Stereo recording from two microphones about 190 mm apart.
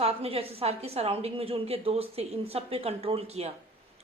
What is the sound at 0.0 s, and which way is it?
A woman's voice, 30° right (ahead or behind).